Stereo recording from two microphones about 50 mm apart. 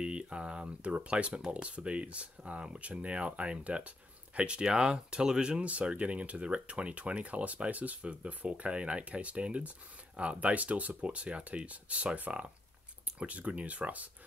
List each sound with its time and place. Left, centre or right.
0.0 s speech: right